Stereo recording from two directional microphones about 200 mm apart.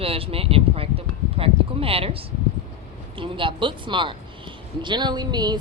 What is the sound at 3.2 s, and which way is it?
Speech, 25° right (ahead or behind).